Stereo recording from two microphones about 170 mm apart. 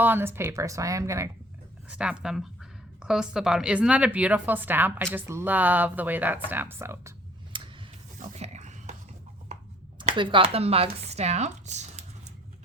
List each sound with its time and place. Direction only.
0.0 s speech: 10° right (ahead or behind)
1.9 s a woman's voice: 5° right (ahead or behind)
7.5 s rub: 30° right (ahead or behind)
8.2 s a sound: 45° right (ahead or behind)
10.2 s speech: 30° right (ahead or behind)